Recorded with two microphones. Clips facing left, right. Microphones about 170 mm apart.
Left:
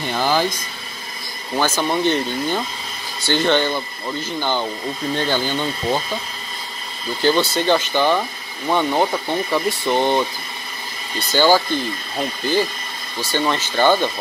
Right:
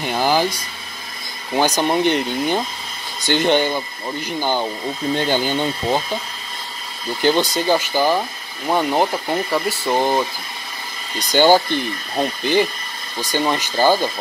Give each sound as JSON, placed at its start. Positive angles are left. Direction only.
{"t": 0.0, "sound": "speech", "side_deg": -15}
{"t": 7.2, "sound": "speech", "side_deg": -15}